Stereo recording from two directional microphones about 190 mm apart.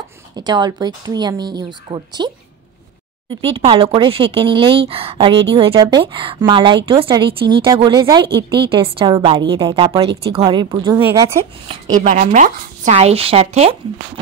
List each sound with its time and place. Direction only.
0.4 s speech: 20° right (ahead or behind)
11.9 s speech: 40° right (ahead or behind)